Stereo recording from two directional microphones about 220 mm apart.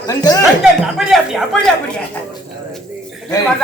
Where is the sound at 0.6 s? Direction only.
Centre (ahead or behind).